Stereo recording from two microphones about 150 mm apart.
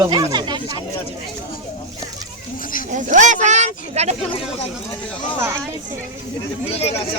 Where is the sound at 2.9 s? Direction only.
55° right (ahead or behind).